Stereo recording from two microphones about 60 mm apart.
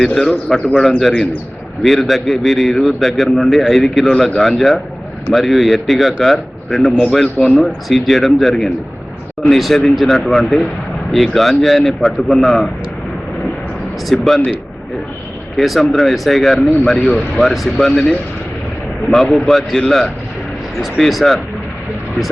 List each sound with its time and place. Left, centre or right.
0.0 s speech: centre
0.8 s a man's voice: centre
14.1 s a man's voice: centre
15.5 s a man's voice: centre